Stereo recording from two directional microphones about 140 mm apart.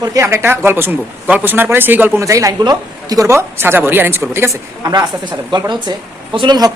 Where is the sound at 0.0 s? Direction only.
20° right (ahead or behind).